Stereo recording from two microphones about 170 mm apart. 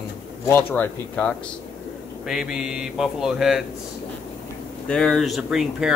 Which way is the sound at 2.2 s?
5° right (ahead or behind).